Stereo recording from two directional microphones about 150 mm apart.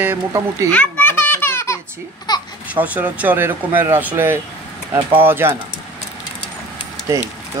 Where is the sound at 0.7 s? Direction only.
10° left (ahead or behind); by 2.4 s 25° left (ahead or behind).